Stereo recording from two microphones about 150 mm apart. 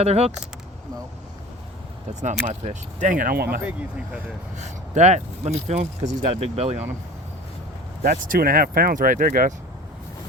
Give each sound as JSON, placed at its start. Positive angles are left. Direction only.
{"t": 0.0, "sound": "speech", "side_deg": -45}
{"t": 2.5, "sound": "speech", "side_deg": -55}
{"t": 4.5, "sound": "speech", "side_deg": -50}
{"t": 8.0, "sound": "speech", "side_deg": -65}